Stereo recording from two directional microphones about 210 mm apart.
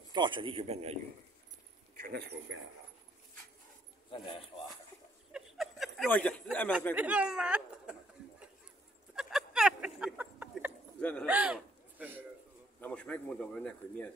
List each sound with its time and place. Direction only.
0.1 s a man's voice: 20° right (ahead or behind)
2.0 s speech: 45° right (ahead or behind)
4.1 s speech: 25° left (ahead or behind)
5.3 s a sound: centre (ahead or behind)
7.0 s speech: 5° right (ahead or behind)
9.1 s a sound: centre (ahead or behind)
11.0 s a man's voice: 5° left (ahead or behind)
11.2 s a man's voice: 5° right (ahead or behind)
12.8 s speech: 5° left (ahead or behind)